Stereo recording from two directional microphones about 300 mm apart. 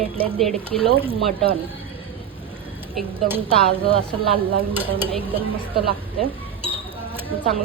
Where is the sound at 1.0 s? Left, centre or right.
Centre.